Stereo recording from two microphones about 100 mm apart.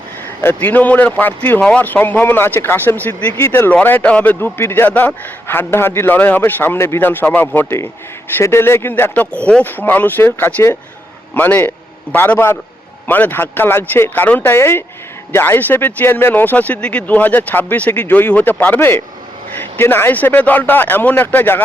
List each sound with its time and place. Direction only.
0.4 s speech: 15° left (ahead or behind)